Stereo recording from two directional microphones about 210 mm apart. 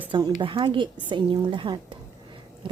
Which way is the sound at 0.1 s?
20° right (ahead or behind).